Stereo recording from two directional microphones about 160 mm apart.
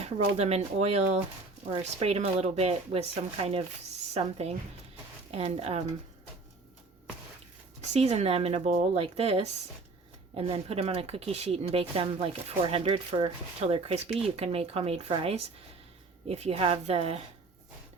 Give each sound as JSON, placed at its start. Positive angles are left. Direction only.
{"t": 0.0, "sound": "speech", "side_deg": -40}
{"t": 7.9, "sound": "speech", "side_deg": -40}